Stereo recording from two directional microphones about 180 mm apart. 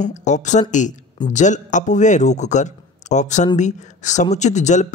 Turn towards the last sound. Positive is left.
turn(degrees=40)  # may be behind; listen again after turning